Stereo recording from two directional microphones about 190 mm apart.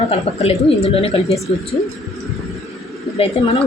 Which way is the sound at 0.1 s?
30° left (ahead or behind).